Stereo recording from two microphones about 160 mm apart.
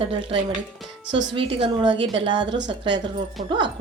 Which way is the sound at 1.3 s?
30° right (ahead or behind).